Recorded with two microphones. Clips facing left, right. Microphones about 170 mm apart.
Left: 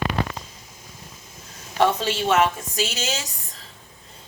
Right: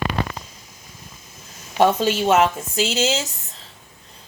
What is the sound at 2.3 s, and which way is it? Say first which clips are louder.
Speech: right 1 dB; 25° right (ahead or behind).